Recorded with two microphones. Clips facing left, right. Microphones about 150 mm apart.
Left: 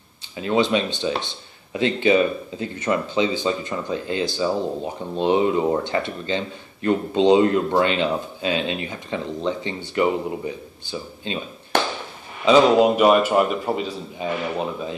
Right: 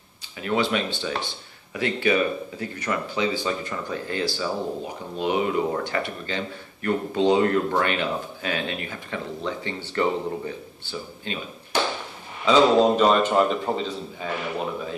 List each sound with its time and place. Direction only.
0.4 s speech: 20° left (ahead or behind)
11.7 s tap: 60° left (ahead or behind)
12.4 s a man's voice: 15° left (ahead or behind)